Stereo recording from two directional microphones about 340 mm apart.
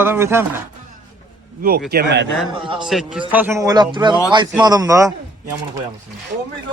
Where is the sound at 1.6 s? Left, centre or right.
Right.